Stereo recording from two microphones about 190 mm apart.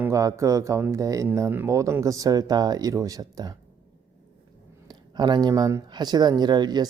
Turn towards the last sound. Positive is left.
turn(degrees=-20)  # may be behind; listen again after turning